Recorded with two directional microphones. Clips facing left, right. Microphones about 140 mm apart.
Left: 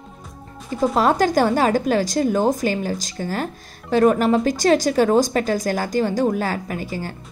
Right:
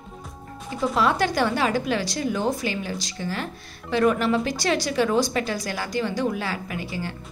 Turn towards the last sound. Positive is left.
turn(degrees=40)  # may be behind; listen again after turning